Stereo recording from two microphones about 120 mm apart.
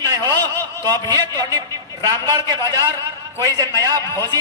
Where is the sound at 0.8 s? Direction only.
30° right (ahead or behind).